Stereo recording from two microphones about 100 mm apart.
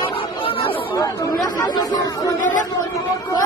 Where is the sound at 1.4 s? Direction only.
40° left (ahead or behind).